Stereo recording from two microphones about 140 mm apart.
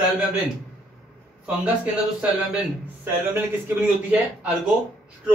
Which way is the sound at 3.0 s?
15° right (ahead or behind).